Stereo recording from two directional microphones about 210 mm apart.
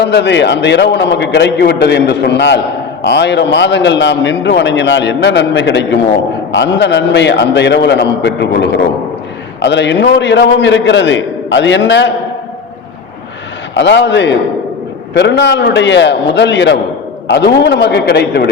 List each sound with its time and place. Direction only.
0.0 s a man's voice: 55° left (ahead or behind)
13.7 s a man's voice: 55° left (ahead or behind)